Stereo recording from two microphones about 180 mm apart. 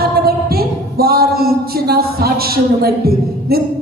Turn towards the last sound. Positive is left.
turn(degrees=-60)  # may be behind; listen again after turning